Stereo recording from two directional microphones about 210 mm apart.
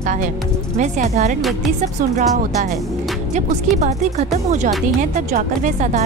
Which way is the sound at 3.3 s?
35° right (ahead or behind).